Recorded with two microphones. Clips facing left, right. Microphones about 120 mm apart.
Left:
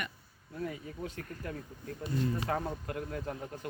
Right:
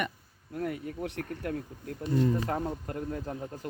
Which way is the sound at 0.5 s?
65° right (ahead or behind).